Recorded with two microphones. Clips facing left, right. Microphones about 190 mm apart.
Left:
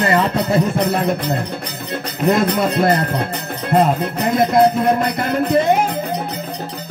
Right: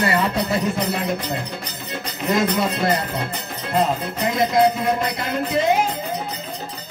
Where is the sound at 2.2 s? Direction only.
55° left (ahead or behind).